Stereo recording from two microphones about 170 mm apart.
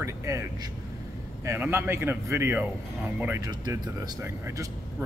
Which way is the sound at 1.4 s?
15° right (ahead or behind).